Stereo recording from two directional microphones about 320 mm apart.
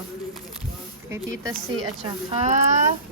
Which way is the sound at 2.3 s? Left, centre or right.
Right.